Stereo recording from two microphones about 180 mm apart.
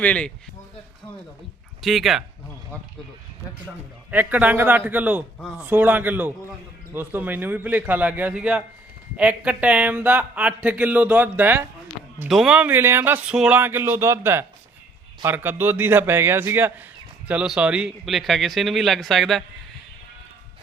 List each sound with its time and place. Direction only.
0.0 s speech: 5° left (ahead or behind)
1.8 s a man's voice: centre (ahead or behind)
4.1 s a man's voice: 10° right (ahead or behind)